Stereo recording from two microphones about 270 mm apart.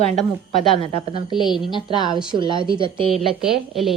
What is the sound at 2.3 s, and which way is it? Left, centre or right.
Speech, centre.